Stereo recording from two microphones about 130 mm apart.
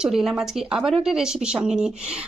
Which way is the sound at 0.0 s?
5° right (ahead or behind).